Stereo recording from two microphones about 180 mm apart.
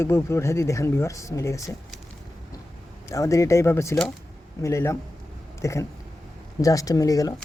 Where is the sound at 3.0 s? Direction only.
15° left (ahead or behind).